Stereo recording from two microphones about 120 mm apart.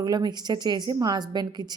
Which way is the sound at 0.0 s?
35° right (ahead or behind).